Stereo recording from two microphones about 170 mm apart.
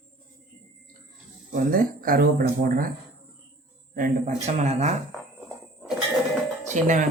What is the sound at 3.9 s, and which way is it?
Speech, 50° right (ahead or behind).